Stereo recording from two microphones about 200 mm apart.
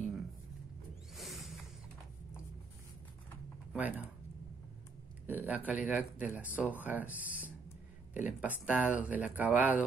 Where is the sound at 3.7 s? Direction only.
10° right (ahead or behind).